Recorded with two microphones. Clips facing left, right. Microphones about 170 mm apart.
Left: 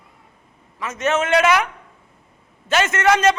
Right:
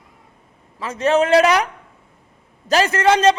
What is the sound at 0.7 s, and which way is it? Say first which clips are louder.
A man's voice: right 4 dB; 30° right (ahead or behind).